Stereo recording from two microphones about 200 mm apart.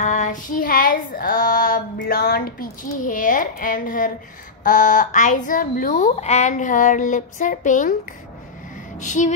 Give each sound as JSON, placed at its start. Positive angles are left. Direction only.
{"t": 0.0, "sound": "female singing", "side_deg": 35}
{"t": 4.6, "sound": "a woman's voice", "side_deg": 40}
{"t": 9.0, "sound": "a woman's voice", "side_deg": 35}